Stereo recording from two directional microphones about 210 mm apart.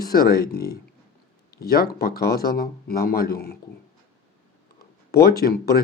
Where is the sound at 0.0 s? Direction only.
45° left (ahead or behind).